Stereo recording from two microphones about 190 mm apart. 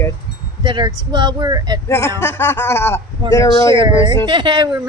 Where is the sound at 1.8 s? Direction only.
15° left (ahead or behind).